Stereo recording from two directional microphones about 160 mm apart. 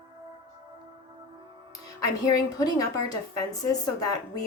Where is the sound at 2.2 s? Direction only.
25° left (ahead or behind).